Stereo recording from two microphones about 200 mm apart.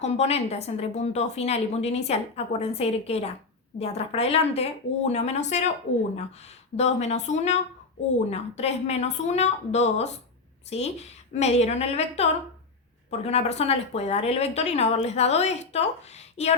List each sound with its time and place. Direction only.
0.0 s a woman's voice: 30° left (ahead or behind)
6.7 s a woman's voice: 35° left (ahead or behind)